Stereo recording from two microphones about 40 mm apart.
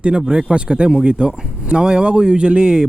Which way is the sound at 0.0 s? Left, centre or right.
Right.